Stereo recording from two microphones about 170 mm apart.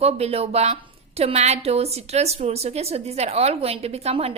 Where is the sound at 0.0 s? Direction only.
35° right (ahead or behind).